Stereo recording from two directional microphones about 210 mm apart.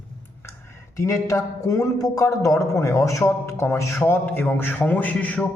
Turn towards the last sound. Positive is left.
turn(degrees=5)  # may be behind; listen again after turning